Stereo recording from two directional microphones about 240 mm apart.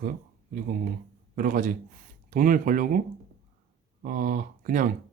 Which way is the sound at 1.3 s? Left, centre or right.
Right.